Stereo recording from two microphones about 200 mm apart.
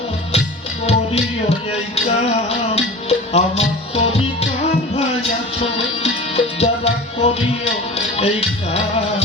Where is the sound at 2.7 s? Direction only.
30° left (ahead or behind).